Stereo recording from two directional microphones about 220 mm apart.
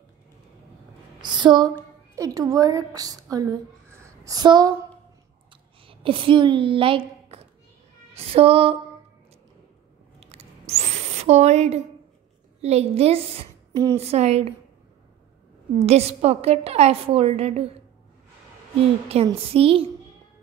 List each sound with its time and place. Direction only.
1.3 s a woman's voice: 20° right (ahead or behind)
5.9 s a woman's voice: 25° right (ahead or behind)
8.1 s female singing: 25° right (ahead or behind)
10.2 s a sound: 30° right (ahead or behind)
12.6 s a woman's voice: 30° right (ahead or behind)
15.8 s a woman's voice: 30° right (ahead or behind)
19.0 s a woman's voice: 25° right (ahead or behind)